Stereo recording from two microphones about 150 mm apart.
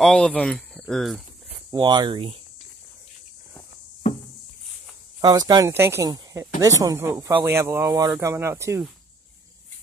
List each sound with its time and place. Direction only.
0.0 s speech: 5° left (ahead or behind)
1.7 s speech: 30° right (ahead or behind)
5.2 s speech: 25° right (ahead or behind)